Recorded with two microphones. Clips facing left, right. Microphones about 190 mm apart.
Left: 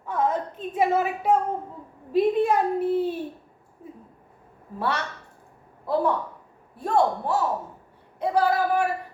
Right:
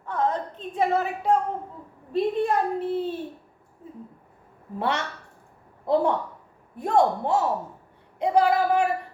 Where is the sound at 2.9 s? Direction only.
10° left (ahead or behind).